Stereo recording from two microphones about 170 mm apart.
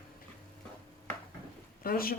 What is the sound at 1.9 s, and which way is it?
Speech, 60° left (ahead or behind).